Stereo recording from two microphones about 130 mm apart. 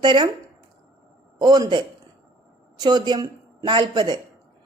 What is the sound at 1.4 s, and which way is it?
A woman's voice, 35° right (ahead or behind).